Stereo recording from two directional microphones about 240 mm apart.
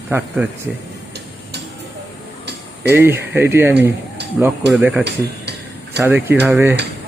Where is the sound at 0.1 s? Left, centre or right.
Centre.